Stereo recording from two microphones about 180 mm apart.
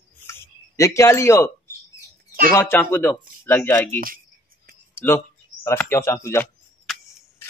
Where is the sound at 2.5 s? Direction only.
10° left (ahead or behind).